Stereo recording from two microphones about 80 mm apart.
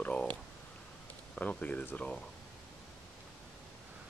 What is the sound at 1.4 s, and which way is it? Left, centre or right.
Speech, centre.